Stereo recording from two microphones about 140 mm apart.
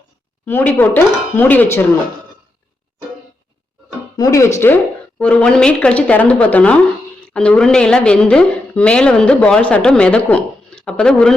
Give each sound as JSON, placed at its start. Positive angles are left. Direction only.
{"t": 0.4, "sound": "a woman's voice", "side_deg": 10}
{"t": 4.2, "sound": "a woman's voice", "side_deg": 20}